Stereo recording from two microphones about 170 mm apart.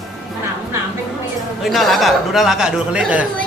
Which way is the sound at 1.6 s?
Centre (ahead or behind).